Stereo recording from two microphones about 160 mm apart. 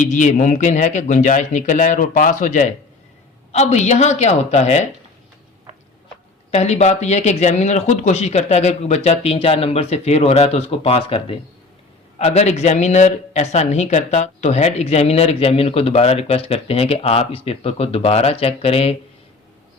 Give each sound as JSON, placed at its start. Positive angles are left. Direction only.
{"t": 0.0, "sound": "speech", "side_deg": 50}
{"t": 6.5, "sound": "a man's voice", "side_deg": 40}